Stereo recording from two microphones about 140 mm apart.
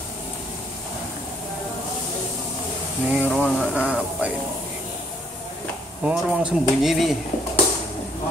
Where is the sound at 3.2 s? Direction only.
Centre (ahead or behind).